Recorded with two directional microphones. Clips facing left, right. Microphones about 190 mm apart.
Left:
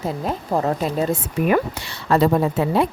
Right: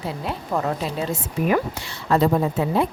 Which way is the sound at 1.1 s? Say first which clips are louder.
Even; 60° left (ahead or behind).